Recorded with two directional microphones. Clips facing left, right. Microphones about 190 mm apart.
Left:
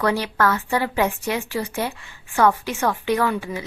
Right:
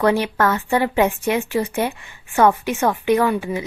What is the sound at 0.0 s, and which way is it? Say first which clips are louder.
A woman's voice: right 3 dB; 20° right (ahead or behind).